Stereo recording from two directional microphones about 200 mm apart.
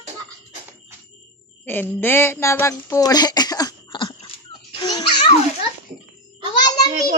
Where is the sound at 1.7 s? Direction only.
10° left (ahead or behind).